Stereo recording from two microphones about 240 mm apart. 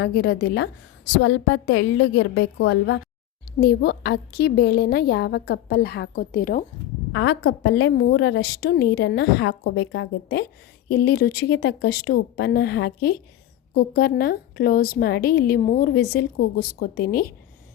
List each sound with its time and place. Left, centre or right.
0.0 s a woman's voice: left
7.1 s a woman's voice: left